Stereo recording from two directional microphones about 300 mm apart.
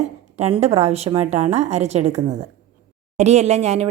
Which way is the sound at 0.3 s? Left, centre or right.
Centre.